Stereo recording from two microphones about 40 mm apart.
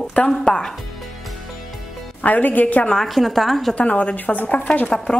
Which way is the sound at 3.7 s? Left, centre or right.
Left.